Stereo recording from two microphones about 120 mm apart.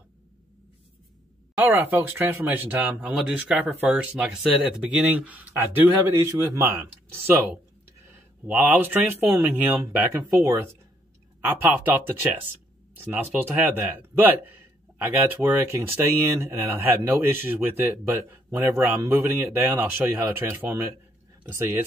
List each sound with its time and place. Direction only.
1.6 s speech: 15° right (ahead or behind)